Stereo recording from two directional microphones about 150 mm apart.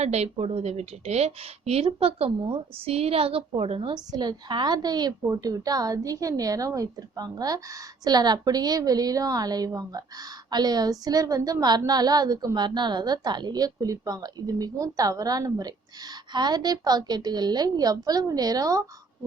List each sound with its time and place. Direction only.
0.0 s a woman's voice: 45° right (ahead or behind); by 18.8 s 25° right (ahead or behind)